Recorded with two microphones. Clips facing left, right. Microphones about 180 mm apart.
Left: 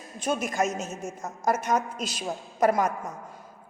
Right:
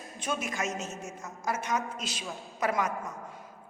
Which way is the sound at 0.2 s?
40° left (ahead or behind).